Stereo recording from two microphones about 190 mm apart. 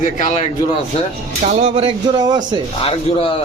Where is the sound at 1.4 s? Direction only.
40° right (ahead or behind).